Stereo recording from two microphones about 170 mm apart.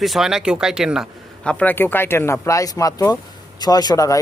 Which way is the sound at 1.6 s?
10° left (ahead or behind).